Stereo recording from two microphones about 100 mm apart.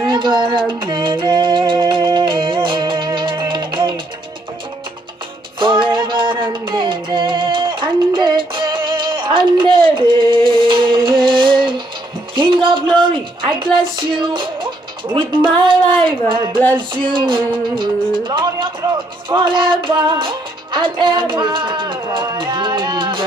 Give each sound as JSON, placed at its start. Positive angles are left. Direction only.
{"t": 0.1, "sound": "music", "side_deg": -50}
{"t": 5.6, "sound": "music", "side_deg": -55}
{"t": 12.4, "sound": "a sound", "side_deg": -55}
{"t": 15.1, "sound": "music", "side_deg": -60}